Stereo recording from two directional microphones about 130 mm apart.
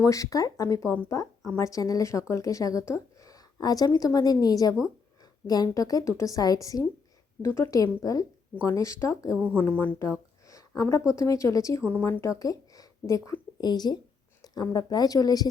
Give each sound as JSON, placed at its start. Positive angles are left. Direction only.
{"t": 0.0, "sound": "a woman's voice", "side_deg": 25}
{"t": 9.6, "sound": "speech", "side_deg": 10}
{"t": 10.1, "sound": "a sound", "side_deg": 25}
{"t": 11.1, "sound": "a woman's voice", "side_deg": 25}
{"t": 11.9, "sound": "speech", "side_deg": 15}
{"t": 12.3, "sound": "a woman's voice", "side_deg": 25}